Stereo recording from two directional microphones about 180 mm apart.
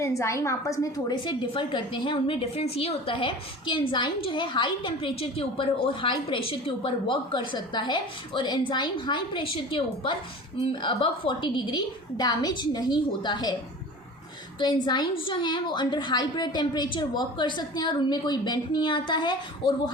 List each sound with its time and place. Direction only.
0.0 s a woman's voice: 15° left (ahead or behind)
14.6 s a woman's voice: 25° left (ahead or behind)